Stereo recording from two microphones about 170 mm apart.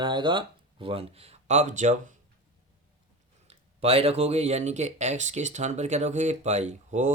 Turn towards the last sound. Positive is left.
turn(degrees=-45)  # may be behind; listen again after turning